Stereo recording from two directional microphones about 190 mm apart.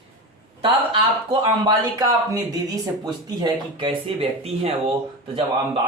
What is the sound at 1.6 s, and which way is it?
Speech, 20° right (ahead or behind).